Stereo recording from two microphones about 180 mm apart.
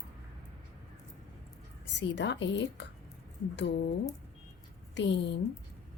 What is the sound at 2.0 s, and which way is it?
Speech, 80° left.